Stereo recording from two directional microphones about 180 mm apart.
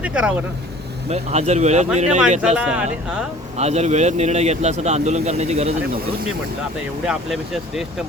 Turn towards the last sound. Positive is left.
turn(degrees=0)  # may be behind; listen again after turning